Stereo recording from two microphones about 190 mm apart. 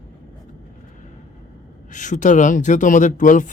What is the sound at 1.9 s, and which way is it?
Speech, 40° left (ahead or behind).